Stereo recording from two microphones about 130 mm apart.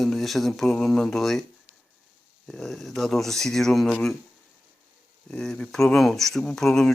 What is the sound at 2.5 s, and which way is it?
Speech, centre (ahead or behind).